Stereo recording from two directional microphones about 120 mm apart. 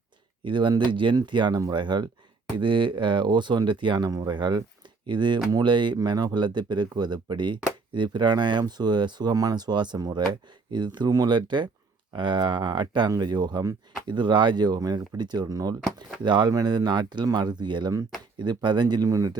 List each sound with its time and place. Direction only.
0.4 s speech: 40° right (ahead or behind)